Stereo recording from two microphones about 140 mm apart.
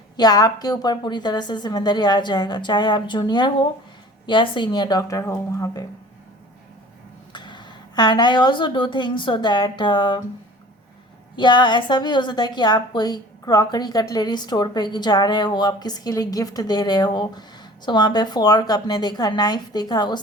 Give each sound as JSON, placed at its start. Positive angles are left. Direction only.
{"t": 0.2, "sound": "a woman's voice", "side_deg": 30}
{"t": 7.3, "sound": "speech", "side_deg": 35}
{"t": 11.3, "sound": "a woman's voice", "side_deg": 35}